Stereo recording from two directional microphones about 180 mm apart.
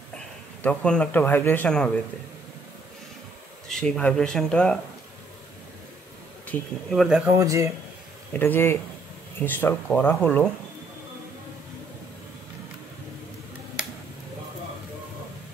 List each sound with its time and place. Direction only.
0.6 s speech: 5° left (ahead or behind)
3.6 s speech: 5° left (ahead or behind)
6.4 s speech: 5° left (ahead or behind)
7.2 s speech: 15° right (ahead or behind)
8.3 s speech: 10° left (ahead or behind)